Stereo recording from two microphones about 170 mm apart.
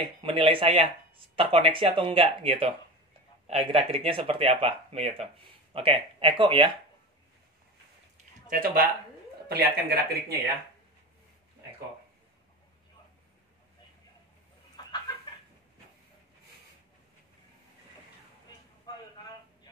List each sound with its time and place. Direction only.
0.2 s speech: 30° right (ahead or behind)
8.5 s speech: 60° right (ahead or behind)
9.5 s speech: 70° right (ahead or behind)
14.8 s chicken: 25° left (ahead or behind)
19.1 s a sound: 25° left (ahead or behind)